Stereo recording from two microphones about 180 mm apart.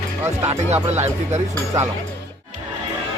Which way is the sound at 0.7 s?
40° right (ahead or behind).